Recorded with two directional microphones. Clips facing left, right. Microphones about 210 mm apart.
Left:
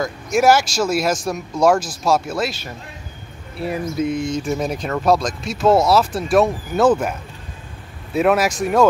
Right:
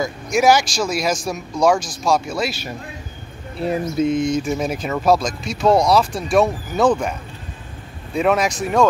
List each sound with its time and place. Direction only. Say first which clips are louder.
0.0 s speech: even; centre (ahead or behind)
3.6 s speech: right 2 dB; 25° right (ahead or behind)
4.5 s speech: even; centre (ahead or behind)